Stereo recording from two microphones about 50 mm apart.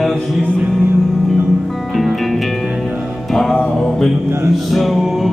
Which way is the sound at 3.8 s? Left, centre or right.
Centre.